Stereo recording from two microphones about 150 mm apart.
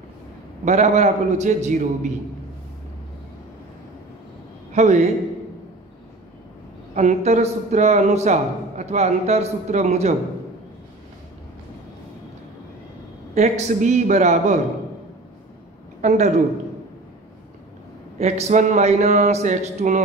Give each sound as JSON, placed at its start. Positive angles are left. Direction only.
{"t": 0.7, "sound": "a man's voice", "side_deg": -50}
{"t": 4.7, "sound": "a man's voice", "side_deg": -50}
{"t": 7.0, "sound": "a man's voice", "side_deg": -50}
{"t": 13.3, "sound": "a man's voice", "side_deg": -50}
{"t": 16.0, "sound": "a man's voice", "side_deg": -50}
{"t": 18.2, "sound": "a man's voice", "side_deg": -45}